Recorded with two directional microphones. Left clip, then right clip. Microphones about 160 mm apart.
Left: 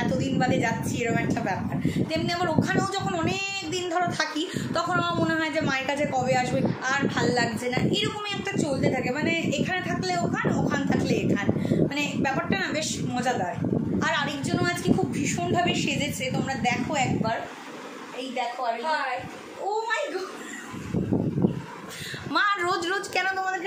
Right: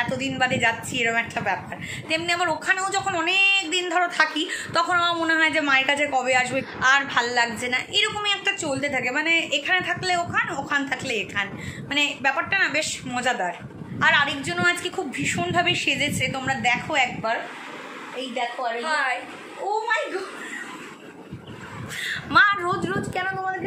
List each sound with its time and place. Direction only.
0.2 s speech: centre (ahead or behind)
22.3 s a woman's voice: 15° left (ahead or behind)